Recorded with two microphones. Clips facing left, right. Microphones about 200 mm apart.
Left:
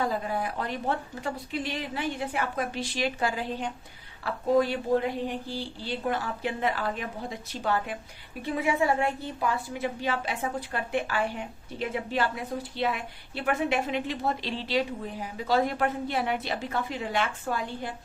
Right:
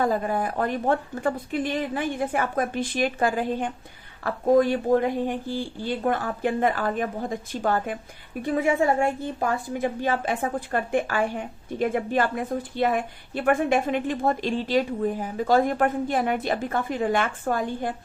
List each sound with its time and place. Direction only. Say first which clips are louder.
0.0 s a woman's voice: right 5 dB; 50° right (ahead or behind)